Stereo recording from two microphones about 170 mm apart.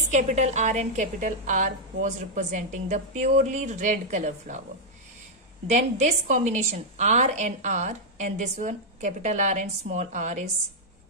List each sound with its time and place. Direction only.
0.1 s a woman's voice: 40° right (ahead or behind)
5.7 s a woman's voice: 45° right (ahead or behind)